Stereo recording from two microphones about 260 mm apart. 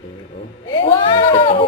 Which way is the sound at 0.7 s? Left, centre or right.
Centre.